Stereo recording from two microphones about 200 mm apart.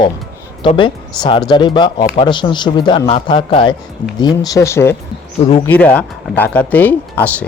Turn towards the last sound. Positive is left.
turn(degrees=10)  # may be behind; listen again after turning